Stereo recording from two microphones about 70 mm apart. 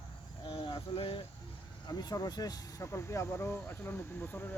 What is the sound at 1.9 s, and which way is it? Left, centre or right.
Speech, left.